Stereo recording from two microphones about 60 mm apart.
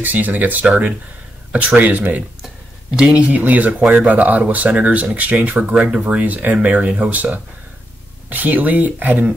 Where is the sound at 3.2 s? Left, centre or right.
Right.